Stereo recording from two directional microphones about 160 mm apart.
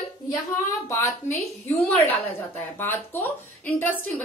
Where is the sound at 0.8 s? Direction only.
20° left (ahead or behind).